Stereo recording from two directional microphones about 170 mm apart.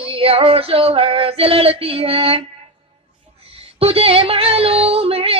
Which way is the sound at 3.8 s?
35° right (ahead or behind).